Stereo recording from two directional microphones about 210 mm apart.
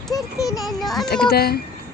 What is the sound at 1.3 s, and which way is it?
Speech, 50° left (ahead or behind).